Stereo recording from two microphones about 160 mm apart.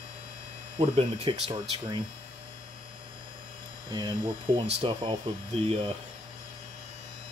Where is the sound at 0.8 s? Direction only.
35° right (ahead or behind).